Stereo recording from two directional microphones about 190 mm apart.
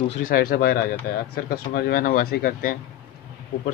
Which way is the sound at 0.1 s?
45° left (ahead or behind).